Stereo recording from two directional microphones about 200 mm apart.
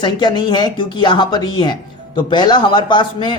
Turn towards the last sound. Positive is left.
turn(degrees=25)  # may be behind; listen again after turning